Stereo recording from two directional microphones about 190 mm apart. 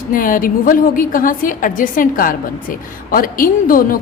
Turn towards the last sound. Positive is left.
turn(degrees=45)  # may be behind; listen again after turning